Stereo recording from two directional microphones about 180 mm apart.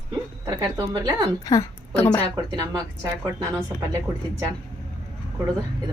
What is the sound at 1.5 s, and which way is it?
Speech, 20° left (ahead or behind).